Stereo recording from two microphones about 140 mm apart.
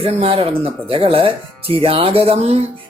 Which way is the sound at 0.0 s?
45° right (ahead or behind).